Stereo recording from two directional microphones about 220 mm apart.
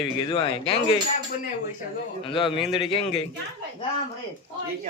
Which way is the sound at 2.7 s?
25° left (ahead or behind).